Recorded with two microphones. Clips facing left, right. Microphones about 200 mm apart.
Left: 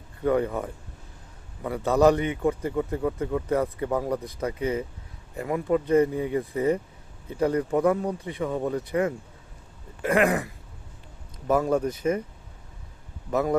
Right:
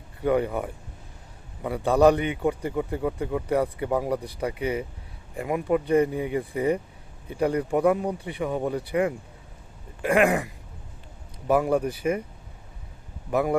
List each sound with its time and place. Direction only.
0.3 s a man's voice: 15° right (ahead or behind)
10.1 s a man's voice: 20° right (ahead or behind)
13.3 s a man's voice: 15° right (ahead or behind)